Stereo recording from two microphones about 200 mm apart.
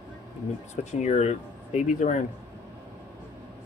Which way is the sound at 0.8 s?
35° left (ahead or behind).